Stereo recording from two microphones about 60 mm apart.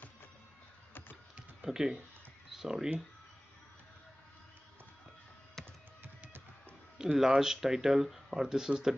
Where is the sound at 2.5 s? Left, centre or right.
Centre.